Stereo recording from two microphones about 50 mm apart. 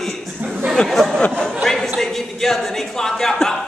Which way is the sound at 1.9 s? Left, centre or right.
Centre.